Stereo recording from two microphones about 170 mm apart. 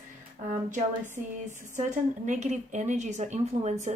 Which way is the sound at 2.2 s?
45° right (ahead or behind).